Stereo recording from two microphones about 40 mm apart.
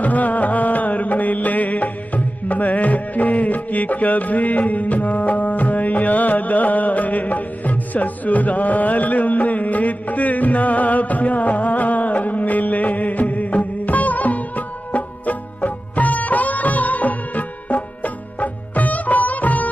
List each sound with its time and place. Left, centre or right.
0.0 s music: left